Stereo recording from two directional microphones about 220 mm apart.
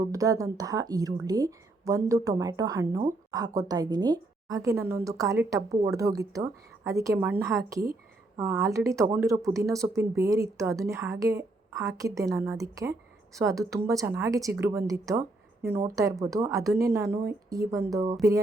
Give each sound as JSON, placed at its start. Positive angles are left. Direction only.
{"t": 0.1, "sound": "speech", "side_deg": -15}